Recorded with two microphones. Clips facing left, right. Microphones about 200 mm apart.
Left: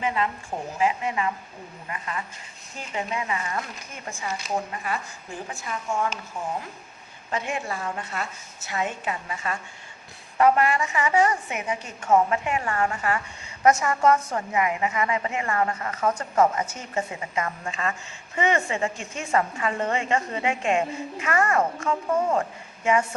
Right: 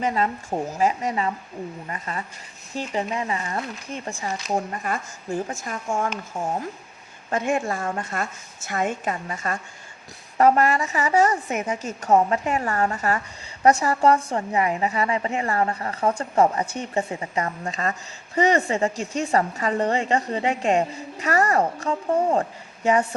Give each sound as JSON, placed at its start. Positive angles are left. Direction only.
{"t": 0.0, "sound": "a woman's voice", "side_deg": -40}